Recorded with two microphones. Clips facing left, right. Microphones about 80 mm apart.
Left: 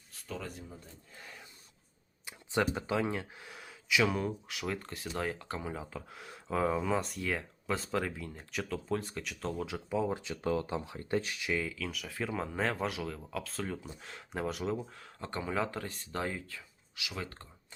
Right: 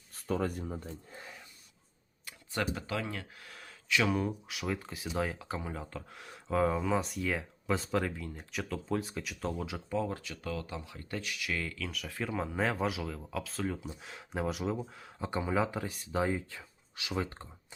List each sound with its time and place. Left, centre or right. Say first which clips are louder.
0.1 s a sound: right 9 dB; right
0.6 s speech: right 9 dB; right
2.2 s speech: left 3 dB; centre
9.9 s speech: left 1 dB; centre
10.2 s speech: left 6 dB; left
11.5 s speech: left 3 dB; centre; by 16.6 s right
16.9 s speech: right 4 dB; right
17.2 s speech: right 7 dB; right